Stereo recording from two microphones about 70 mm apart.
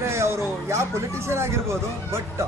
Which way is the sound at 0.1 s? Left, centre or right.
Right.